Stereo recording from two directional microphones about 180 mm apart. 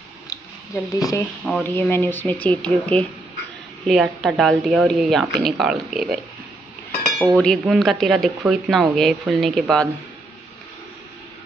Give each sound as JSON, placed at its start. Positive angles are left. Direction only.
{"t": 0.3, "sound": "a sound", "side_deg": 20}
{"t": 0.9, "sound": "speech", "side_deg": 20}
{"t": 1.4, "sound": "speech", "side_deg": 5}
{"t": 7.3, "sound": "speech", "side_deg": 0}